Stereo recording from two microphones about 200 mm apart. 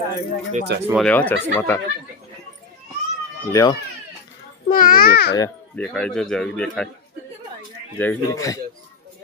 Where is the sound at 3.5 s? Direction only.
15° left (ahead or behind).